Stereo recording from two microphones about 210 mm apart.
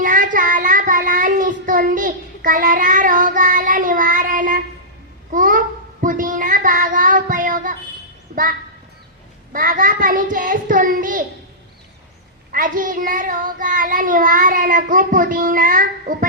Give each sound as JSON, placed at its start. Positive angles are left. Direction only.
{"t": 0.0, "sound": "child singing", "side_deg": -40}
{"t": 9.5, "sound": "child singing", "side_deg": -40}
{"t": 12.5, "sound": "child singing", "side_deg": -40}